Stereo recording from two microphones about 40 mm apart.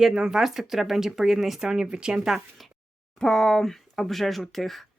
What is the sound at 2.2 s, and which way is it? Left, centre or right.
Speech, centre.